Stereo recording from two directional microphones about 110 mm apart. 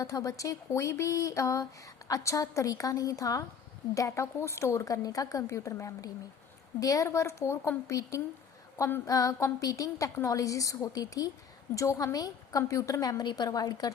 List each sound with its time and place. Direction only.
0.0 s a woman's voice: 30° left (ahead or behind)